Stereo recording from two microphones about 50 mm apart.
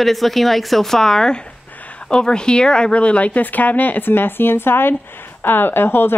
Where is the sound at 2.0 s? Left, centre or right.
Centre.